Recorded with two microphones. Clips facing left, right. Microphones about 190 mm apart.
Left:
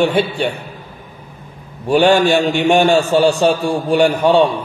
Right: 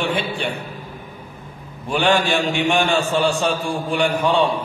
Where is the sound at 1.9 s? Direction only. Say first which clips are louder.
Left 7 dB; 40° left (ahead or behind).